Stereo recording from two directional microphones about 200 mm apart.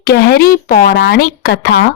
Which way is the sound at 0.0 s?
50° left (ahead or behind).